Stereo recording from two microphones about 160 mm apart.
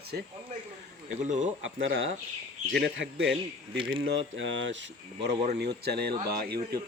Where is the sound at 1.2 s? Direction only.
50° right (ahead or behind).